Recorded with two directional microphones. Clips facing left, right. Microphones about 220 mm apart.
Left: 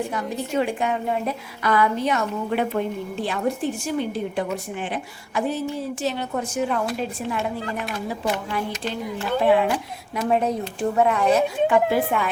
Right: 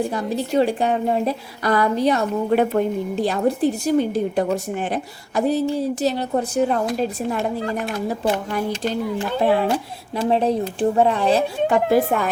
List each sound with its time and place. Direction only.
0.0 s a woman's voice: 35° right (ahead or behind)